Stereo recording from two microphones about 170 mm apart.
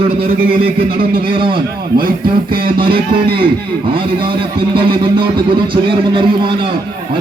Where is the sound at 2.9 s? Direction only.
60° right (ahead or behind).